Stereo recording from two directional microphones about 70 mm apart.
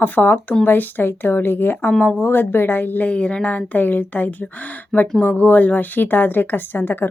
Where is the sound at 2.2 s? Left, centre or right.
Left.